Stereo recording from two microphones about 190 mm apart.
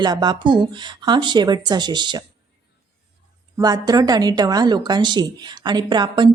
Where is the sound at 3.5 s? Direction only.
20° right (ahead or behind).